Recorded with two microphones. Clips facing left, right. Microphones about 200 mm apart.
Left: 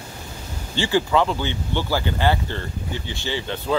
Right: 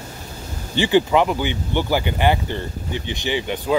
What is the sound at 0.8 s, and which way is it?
Speech, 20° right (ahead or behind).